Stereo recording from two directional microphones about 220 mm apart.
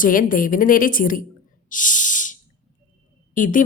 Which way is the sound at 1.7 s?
35° left (ahead or behind).